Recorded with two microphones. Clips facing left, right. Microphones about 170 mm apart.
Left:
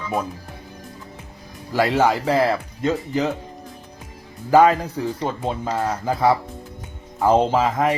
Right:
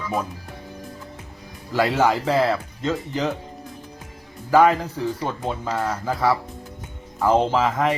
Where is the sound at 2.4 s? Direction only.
15° left (ahead or behind).